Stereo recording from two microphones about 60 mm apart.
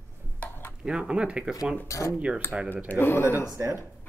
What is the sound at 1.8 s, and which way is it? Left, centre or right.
Speech, left.